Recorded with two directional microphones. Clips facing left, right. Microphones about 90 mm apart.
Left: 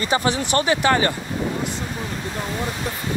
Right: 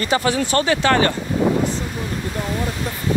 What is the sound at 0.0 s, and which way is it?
Speech, 20° left (ahead or behind).